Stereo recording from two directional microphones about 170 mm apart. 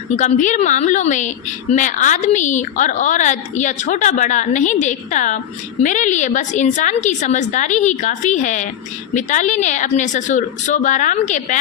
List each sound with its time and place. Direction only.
0.2 s a woman's voice: 45° left (ahead or behind)